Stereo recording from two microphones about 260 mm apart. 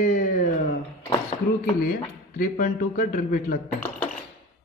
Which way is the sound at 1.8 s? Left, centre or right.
Left.